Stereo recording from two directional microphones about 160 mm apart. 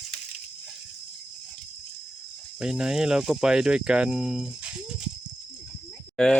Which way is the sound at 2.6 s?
5° right (ahead or behind).